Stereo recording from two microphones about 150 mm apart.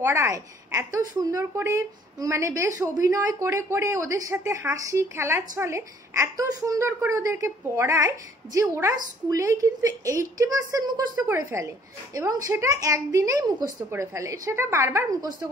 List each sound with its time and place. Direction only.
0.0 s a woman's voice: 20° right (ahead or behind)